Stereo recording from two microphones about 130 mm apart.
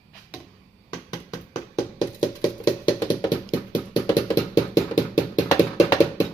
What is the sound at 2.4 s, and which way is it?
Music, 30° left (ahead or behind).